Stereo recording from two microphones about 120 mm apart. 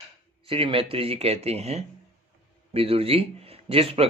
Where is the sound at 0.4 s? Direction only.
50° right (ahead or behind).